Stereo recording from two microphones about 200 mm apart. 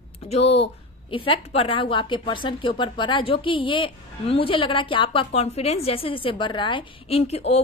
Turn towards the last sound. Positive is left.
turn(degrees=30)  # may be behind; listen again after turning